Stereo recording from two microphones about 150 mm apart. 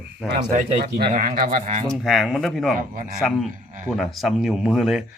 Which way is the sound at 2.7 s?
65° right (ahead or behind).